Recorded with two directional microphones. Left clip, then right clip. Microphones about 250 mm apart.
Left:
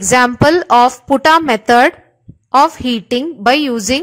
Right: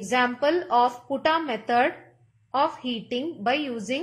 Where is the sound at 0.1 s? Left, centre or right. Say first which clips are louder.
Left 12 dB; left.